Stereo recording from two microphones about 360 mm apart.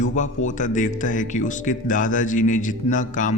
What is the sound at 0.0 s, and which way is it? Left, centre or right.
Speech, left.